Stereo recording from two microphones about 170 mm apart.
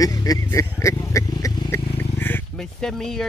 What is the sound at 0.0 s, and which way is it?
Vehicle, 20° left (ahead or behind).